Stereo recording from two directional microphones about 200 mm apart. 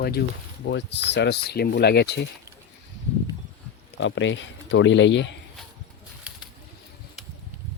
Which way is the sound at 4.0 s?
65° left (ahead or behind).